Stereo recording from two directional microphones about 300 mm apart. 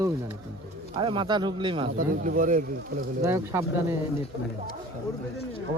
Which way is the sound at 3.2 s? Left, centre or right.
Centre.